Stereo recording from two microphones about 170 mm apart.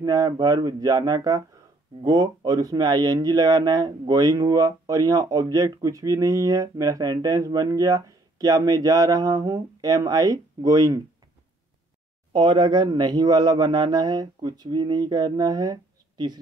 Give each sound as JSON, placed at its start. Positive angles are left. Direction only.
{"t": 0.0, "sound": "speech", "side_deg": -20}
{"t": 12.3, "sound": "speech", "side_deg": -25}